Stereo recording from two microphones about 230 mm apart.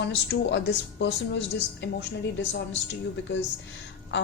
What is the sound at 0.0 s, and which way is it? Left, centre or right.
A woman's voice, left.